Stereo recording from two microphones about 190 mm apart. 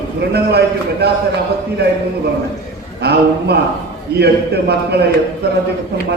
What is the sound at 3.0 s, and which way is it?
A man's voice, 60° right (ahead or behind).